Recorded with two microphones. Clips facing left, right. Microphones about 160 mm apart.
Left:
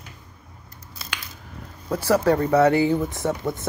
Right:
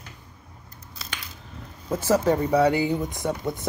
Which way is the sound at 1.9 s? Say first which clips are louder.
Left 2 dB; 20° right (ahead or behind).